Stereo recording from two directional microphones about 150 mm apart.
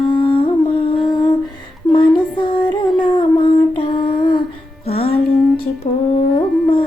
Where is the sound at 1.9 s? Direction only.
35° left (ahead or behind).